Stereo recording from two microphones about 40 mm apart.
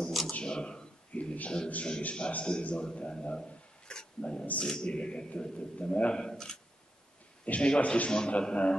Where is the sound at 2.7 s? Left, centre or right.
Left.